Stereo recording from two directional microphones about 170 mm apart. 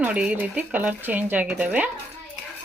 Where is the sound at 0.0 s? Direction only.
10° right (ahead or behind).